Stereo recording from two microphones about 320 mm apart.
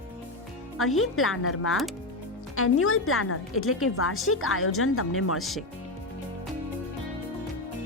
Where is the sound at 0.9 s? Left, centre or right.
Left.